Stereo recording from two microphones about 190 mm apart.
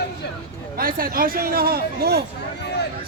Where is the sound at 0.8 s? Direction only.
50° right (ahead or behind).